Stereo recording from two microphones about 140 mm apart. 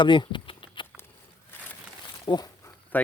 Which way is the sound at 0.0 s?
35° left (ahead or behind).